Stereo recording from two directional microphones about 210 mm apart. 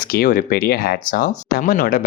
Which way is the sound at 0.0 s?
45° left (ahead or behind).